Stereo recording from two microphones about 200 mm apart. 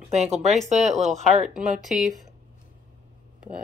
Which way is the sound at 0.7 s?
35° right (ahead or behind).